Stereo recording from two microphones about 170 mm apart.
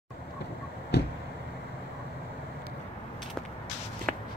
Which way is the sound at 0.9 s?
75° left (ahead or behind).